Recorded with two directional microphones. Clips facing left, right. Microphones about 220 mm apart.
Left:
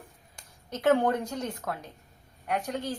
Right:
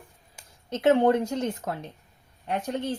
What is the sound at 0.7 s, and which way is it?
A woman's voice, 25° right (ahead or behind).